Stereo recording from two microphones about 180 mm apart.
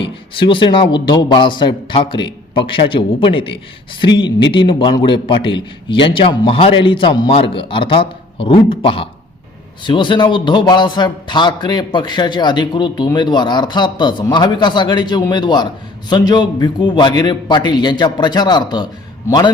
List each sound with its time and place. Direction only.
0.0 s a man's voice: 30° left (ahead or behind)
4.5 s a man's voice: 25° left (ahead or behind)